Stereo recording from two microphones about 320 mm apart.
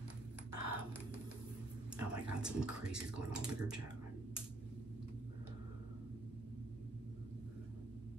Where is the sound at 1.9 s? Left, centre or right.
Centre.